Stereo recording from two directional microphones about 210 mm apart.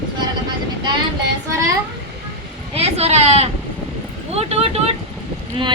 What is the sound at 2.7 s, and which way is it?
Speech, 30° right (ahead or behind).